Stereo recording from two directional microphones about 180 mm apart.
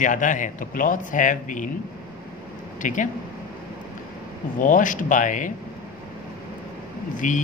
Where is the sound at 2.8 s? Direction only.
45° left (ahead or behind).